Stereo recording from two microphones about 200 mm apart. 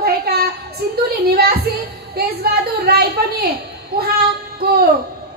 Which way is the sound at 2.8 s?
50° right (ahead or behind).